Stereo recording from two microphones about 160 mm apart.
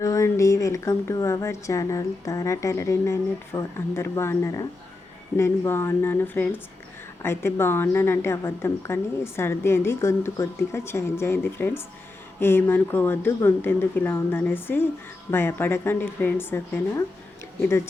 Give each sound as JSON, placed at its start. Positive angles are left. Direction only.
{"t": 0.0, "sound": "a woman's voice", "side_deg": 20}